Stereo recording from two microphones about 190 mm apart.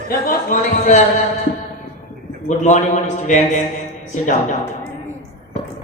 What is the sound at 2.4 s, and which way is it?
A man's voice, 40° left (ahead or behind).